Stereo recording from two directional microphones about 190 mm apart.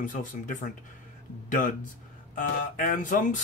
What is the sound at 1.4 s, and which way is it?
Speech, 45° left (ahead or behind).